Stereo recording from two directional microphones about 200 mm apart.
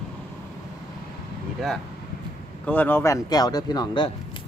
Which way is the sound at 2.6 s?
10° left (ahead or behind).